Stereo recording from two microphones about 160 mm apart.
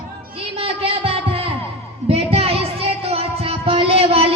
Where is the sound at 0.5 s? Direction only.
35° right (ahead or behind).